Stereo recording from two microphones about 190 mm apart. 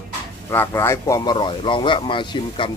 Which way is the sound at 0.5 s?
15° left (ahead or behind).